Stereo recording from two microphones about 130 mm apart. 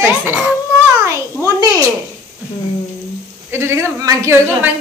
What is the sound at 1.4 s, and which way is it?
Speech, 25° right (ahead or behind).